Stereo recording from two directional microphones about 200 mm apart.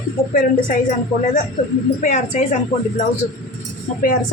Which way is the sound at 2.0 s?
35° left (ahead or behind).